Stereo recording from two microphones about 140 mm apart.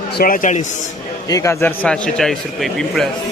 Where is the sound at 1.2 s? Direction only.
25° left (ahead or behind).